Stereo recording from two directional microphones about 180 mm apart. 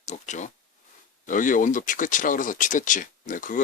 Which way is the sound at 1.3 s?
45° left (ahead or behind).